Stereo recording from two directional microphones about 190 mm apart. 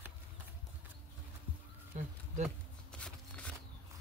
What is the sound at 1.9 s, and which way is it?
Speech, 40° right (ahead or behind).